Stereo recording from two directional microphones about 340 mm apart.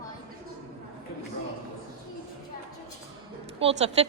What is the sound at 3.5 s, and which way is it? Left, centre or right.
Speech, centre.